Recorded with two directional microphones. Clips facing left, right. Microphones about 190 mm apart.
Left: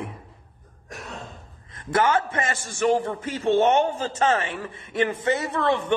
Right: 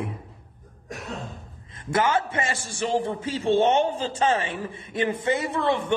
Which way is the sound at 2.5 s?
10° right (ahead or behind).